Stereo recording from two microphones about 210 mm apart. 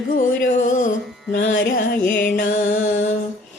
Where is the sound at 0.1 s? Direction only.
40° left (ahead or behind).